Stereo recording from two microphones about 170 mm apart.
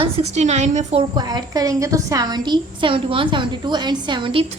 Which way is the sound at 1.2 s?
25° right (ahead or behind).